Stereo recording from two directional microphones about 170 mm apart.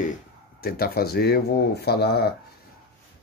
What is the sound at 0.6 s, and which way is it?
Speech, 60° left (ahead or behind).